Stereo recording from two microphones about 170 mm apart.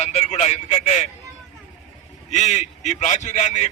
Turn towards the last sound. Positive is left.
turn(degrees=45)  # may be behind; listen again after turning